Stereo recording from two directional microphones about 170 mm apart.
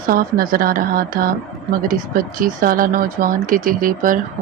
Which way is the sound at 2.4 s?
55° right (ahead or behind).